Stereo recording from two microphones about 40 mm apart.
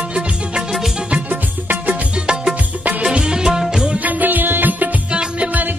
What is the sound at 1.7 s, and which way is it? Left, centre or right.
Music, right.